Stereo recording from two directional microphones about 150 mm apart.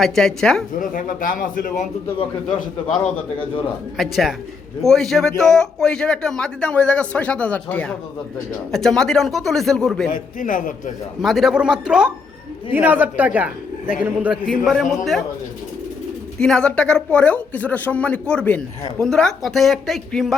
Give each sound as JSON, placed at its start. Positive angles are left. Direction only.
{"t": 0.0, "sound": "a man's voice", "side_deg": 5}
{"t": 0.8, "sound": "speech", "side_deg": 65}
{"t": 2.9, "sound": "a man's voice", "side_deg": 5}
{"t": 10.1, "sound": "speech", "side_deg": 65}
{"t": 11.2, "sound": "a man's voice", "side_deg": 0}
{"t": 14.6, "sound": "a man's voice", "side_deg": 0}
{"t": 16.4, "sound": "speech", "side_deg": 5}